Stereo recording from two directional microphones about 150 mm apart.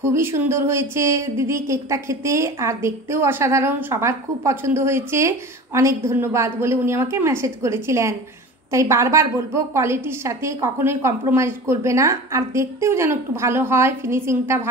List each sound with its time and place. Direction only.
0.0 s speech: 15° right (ahead or behind)